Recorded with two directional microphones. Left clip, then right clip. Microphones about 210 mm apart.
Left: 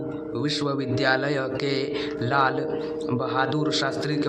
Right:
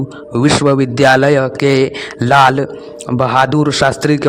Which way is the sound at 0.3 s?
45° right (ahead or behind).